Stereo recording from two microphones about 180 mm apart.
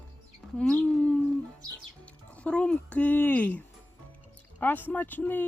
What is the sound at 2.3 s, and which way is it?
Speech, 5° left (ahead or behind).